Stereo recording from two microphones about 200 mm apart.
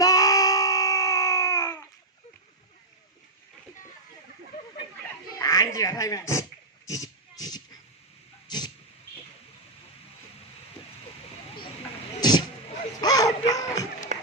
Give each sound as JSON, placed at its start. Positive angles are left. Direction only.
{"t": 0.0, "sound": "baby cry", "side_deg": 15}
{"t": 5.4, "sound": "speech", "side_deg": 15}
{"t": 6.8, "sound": "a sound", "side_deg": 15}
{"t": 8.4, "sound": "vehicle", "side_deg": 20}
{"t": 13.0, "sound": "a sound", "side_deg": 20}
{"t": 14.1, "sound": "music", "side_deg": -40}